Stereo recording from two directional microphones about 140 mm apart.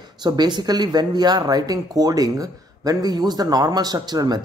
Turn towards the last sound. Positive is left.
turn(degrees=-30)  # may be behind; listen again after turning